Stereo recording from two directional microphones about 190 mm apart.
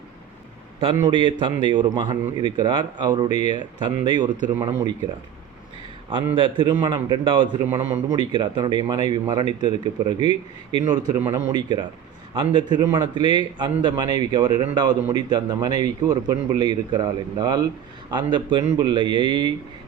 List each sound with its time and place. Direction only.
0.9 s a man's voice: 20° right (ahead or behind)
6.3 s a man's voice: 25° right (ahead or behind)
7.6 s a man's voice: 10° right (ahead or behind)
8.1 s a man's voice: 25° right (ahead or behind)